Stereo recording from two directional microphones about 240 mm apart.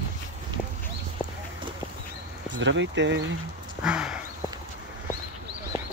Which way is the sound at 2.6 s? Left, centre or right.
Right.